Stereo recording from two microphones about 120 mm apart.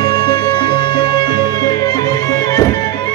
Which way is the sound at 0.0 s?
40° left (ahead or behind).